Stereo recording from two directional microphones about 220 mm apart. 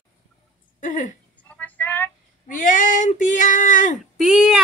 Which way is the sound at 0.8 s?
35° left (ahead or behind).